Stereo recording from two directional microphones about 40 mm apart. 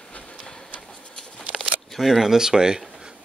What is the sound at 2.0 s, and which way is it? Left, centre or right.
Speech, centre.